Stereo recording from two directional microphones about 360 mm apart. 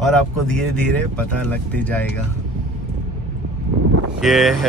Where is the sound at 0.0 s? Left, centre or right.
Centre.